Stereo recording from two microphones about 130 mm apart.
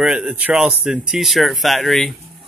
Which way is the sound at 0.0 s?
5° right (ahead or behind).